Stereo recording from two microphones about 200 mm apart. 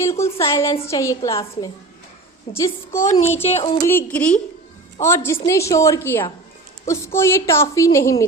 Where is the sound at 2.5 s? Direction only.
30° left (ahead or behind).